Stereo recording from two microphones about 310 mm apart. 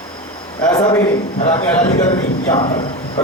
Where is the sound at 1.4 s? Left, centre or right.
Left.